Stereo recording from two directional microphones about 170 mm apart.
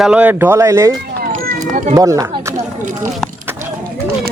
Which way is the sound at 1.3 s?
45° right (ahead or behind).